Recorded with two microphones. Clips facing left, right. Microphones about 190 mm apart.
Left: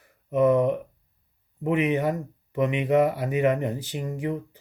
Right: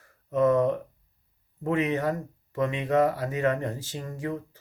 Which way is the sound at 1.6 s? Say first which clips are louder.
Left 2 dB; 15° left (ahead or behind).